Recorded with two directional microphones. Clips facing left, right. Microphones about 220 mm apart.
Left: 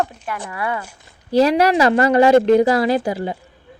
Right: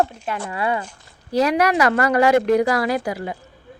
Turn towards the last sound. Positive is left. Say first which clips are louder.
# left 4 dB
turn(degrees=30)  # may be behind; listen again after turning